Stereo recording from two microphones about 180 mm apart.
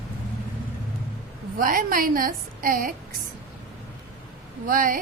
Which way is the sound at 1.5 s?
50° right (ahead or behind).